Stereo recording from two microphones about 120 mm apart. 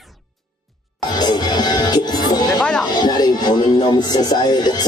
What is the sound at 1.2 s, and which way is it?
Music, 35° left (ahead or behind).